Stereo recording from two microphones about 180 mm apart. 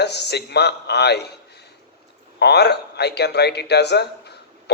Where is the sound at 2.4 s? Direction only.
65° left (ahead or behind).